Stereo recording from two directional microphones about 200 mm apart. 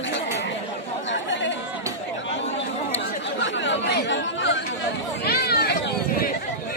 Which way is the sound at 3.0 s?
65° left (ahead or behind).